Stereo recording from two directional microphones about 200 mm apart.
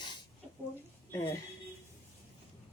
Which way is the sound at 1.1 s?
10° left (ahead or behind).